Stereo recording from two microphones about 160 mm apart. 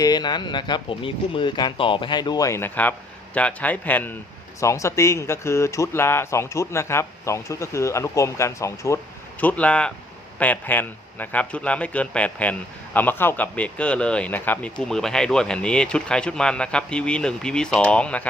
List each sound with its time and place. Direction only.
0.0 s speech: 25° left (ahead or behind); by 18.3 s 5° left (ahead or behind)